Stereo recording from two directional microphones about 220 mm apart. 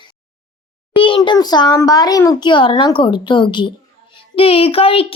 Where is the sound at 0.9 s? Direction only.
20° left (ahead or behind).